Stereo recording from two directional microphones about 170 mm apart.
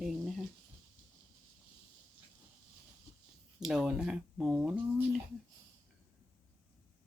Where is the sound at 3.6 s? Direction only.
Centre (ahead or behind).